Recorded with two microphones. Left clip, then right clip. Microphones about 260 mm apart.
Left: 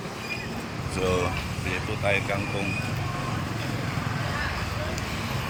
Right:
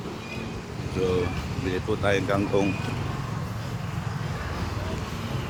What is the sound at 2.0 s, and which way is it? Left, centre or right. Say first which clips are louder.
Speech: right 1 dB; centre.